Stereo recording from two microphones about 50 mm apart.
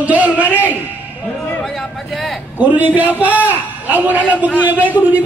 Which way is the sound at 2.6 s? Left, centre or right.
Right.